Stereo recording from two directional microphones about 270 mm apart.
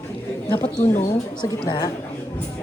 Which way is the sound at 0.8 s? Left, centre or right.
Left.